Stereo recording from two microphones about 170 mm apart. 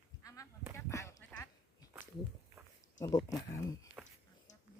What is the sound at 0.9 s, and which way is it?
Duck, 15° left (ahead or behind).